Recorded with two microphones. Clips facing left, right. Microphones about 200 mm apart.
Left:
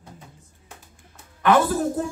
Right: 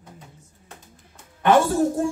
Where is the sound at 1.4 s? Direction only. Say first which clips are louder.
Right 1 dB; 25° right (ahead or behind).